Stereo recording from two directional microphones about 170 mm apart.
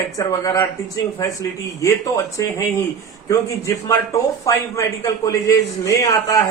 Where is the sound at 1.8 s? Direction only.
20° left (ahead or behind).